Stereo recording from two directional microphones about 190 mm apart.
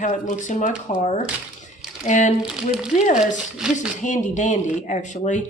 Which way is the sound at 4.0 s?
40° left (ahead or behind).